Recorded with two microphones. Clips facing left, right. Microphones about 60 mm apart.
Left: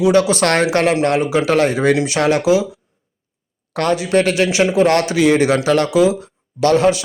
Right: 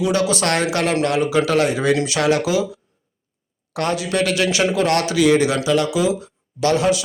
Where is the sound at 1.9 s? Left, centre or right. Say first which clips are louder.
Left 2 dB; left.